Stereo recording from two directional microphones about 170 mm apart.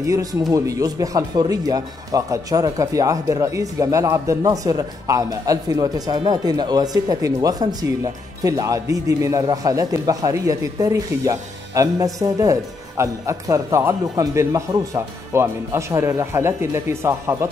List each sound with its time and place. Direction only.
0.0 s speech: 20° right (ahead or behind)